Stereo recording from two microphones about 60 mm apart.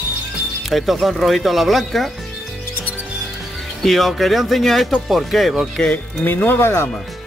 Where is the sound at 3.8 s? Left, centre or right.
Centre.